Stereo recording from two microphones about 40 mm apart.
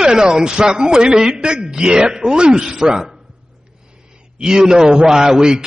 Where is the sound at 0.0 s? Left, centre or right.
Centre.